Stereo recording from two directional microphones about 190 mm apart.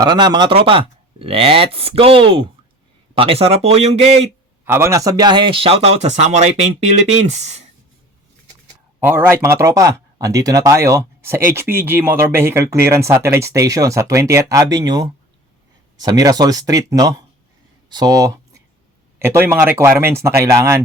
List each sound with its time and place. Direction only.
0.0 s speech: 20° right (ahead or behind)
4.6 s speech: 15° right (ahead or behind); by 6.8 s 35° right (ahead or behind)
9.0 s speech: 10° right (ahead or behind)